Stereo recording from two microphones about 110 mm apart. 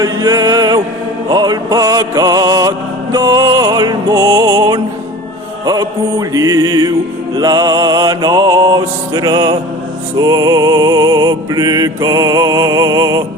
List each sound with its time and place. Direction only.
0.0 s music: 35° right (ahead or behind)